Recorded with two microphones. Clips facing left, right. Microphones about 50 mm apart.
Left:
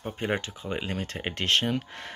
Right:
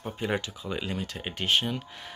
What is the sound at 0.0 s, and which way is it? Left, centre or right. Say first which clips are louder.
Speech: left 1 dB; left.